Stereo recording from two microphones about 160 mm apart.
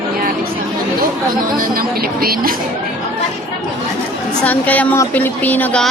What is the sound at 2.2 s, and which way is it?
Speech, 65° right (ahead or behind).